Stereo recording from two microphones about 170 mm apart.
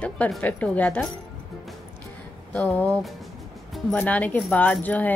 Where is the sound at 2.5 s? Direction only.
10° left (ahead or behind).